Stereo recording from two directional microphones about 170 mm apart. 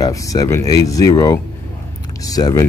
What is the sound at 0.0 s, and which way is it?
A man's voice, 20° left (ahead or behind).